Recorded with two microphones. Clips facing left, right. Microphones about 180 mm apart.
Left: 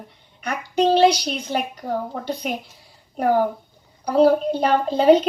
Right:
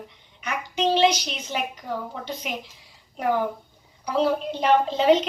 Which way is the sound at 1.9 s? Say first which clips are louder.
Left 5 dB; 40° left (ahead or behind).